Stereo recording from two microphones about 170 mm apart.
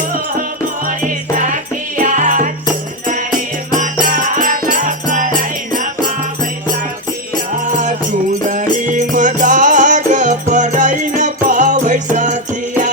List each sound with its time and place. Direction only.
2.0 s music: 45° right (ahead or behind)
4.2 s music: 55° right (ahead or behind)
7.5 s music: 45° right (ahead or behind)